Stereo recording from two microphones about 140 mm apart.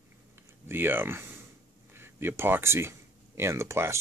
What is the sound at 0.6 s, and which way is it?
Speech, 15° right (ahead or behind).